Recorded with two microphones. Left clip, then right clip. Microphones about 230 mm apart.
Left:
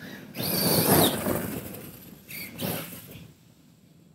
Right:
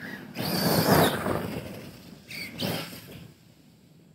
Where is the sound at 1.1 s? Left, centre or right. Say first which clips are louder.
Even; left; by 3.0 s centre.